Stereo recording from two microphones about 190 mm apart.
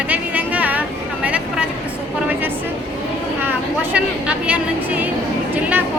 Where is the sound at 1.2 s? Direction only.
5° right (ahead or behind).